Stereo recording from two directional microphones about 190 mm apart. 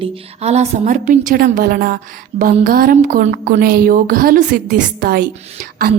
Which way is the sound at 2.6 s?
50° right (ahead or behind).